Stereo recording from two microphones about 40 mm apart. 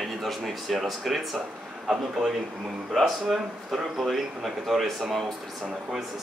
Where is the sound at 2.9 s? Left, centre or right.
Centre.